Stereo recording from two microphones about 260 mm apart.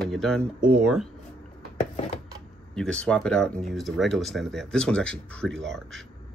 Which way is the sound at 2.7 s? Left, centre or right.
Centre.